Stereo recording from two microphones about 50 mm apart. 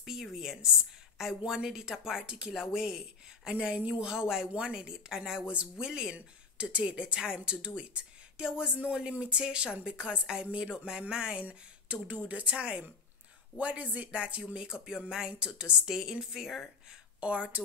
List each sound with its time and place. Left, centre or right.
0.0 s a woman's voice: centre
6.1 s a woman's voice: right
11.4 s speech: right
14.4 s a woman's voice: centre
15.9 s a woman's voice: centre
17.2 s speech: right